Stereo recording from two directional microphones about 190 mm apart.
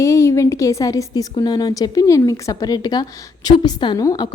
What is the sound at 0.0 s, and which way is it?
A woman's voice, 15° left (ahead or behind).